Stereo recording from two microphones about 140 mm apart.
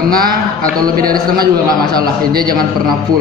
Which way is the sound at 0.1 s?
90° right.